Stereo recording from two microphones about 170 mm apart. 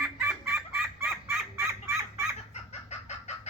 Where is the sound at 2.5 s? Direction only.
40° left (ahead or behind).